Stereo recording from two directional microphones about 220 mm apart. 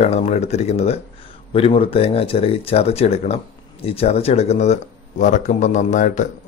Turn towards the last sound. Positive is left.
turn(degrees=35)  # may be behind; listen again after turning